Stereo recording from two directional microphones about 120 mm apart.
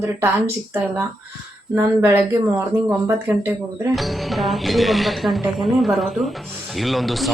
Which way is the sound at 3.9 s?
Centre (ahead or behind).